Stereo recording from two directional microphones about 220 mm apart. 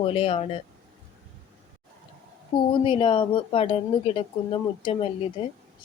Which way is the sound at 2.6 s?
25° left (ahead or behind).